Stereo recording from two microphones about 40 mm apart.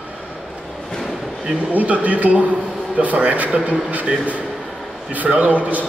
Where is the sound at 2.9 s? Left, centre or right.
Right.